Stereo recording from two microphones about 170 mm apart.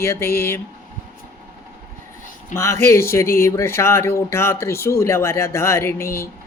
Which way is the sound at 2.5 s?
15° left (ahead or behind).